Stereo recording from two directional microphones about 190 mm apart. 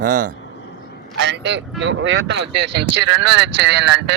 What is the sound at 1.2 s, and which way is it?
Speech, 65° right (ahead or behind).